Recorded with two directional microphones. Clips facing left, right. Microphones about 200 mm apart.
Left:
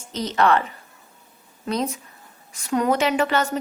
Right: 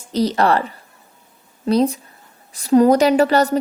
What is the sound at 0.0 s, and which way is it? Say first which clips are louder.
A woman's voice: right 4 dB; 35° right (ahead or behind).